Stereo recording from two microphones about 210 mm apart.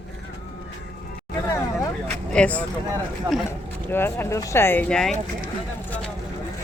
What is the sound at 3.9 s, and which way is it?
Speech, 10° left (ahead or behind).